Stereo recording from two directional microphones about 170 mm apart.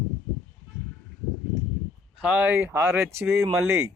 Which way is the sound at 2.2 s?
10° right (ahead or behind).